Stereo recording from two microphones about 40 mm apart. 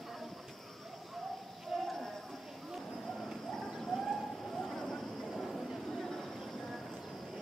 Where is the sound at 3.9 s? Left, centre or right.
Centre.